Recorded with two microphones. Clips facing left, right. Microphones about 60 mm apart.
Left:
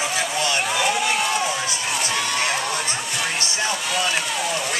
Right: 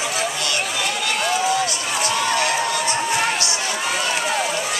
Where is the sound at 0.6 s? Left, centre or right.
Centre.